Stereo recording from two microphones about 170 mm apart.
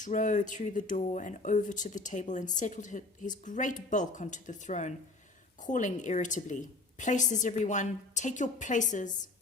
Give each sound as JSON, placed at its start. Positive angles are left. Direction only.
{"t": 0.0, "sound": "speech", "side_deg": 45}